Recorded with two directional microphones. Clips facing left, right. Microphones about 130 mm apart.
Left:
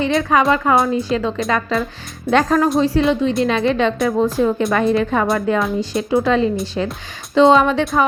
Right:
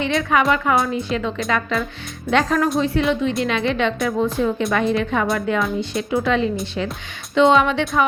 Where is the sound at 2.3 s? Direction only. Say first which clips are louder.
Left 3 dB; 35° left (ahead or behind).